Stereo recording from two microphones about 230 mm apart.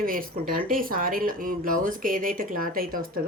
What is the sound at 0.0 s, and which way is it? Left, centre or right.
A woman's voice, right.